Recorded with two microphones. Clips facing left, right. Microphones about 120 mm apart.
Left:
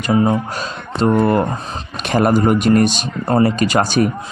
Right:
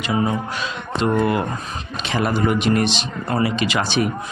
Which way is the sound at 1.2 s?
40° left (ahead or behind).